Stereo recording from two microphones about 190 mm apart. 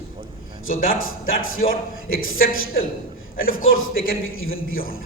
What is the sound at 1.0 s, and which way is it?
Speech, 90° left.